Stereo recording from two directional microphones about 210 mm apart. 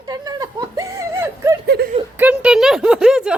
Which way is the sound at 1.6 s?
50° right (ahead or behind).